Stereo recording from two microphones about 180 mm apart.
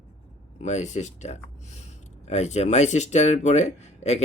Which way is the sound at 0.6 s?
40° left (ahead or behind).